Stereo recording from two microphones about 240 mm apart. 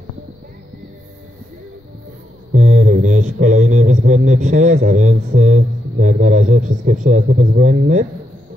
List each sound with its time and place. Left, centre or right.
2.5 s a man's voice: right